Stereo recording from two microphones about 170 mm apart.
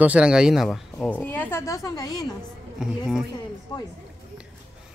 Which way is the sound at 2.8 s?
5° right (ahead or behind).